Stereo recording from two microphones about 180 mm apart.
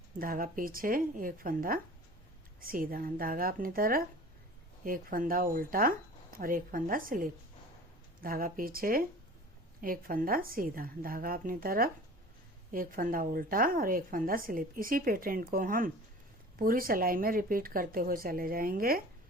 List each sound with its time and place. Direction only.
0.2 s a woman's voice: 50° right (ahead or behind)